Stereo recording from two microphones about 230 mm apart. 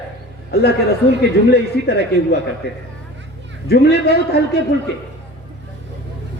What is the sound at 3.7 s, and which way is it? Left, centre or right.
Speech, left.